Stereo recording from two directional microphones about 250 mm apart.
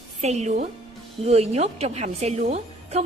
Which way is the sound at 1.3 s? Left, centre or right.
Right.